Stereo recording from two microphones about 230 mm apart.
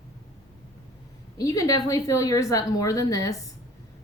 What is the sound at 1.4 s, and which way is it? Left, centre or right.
A woman's voice, centre.